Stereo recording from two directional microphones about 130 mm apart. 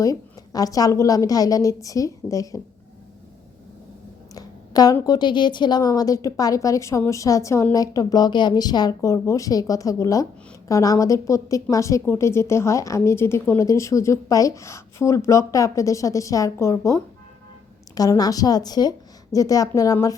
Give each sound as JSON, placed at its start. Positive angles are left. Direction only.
{"t": 0.0, "sound": "a woman's voice", "side_deg": 25}
{"t": 4.4, "sound": "a sound", "side_deg": 30}
{"t": 5.0, "sound": "a woman's voice", "side_deg": 35}